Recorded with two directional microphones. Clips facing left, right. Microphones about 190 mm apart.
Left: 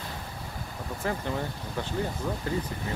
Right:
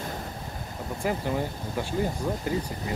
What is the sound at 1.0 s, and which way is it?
Speech, 15° right (ahead or behind).